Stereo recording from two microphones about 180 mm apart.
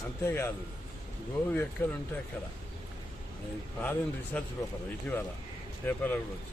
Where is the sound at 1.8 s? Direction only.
10° left (ahead or behind).